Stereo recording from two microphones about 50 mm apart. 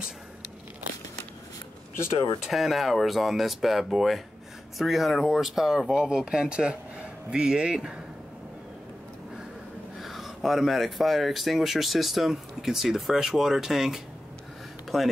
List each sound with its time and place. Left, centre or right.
2.4 s speech: centre
9.9 s speech: centre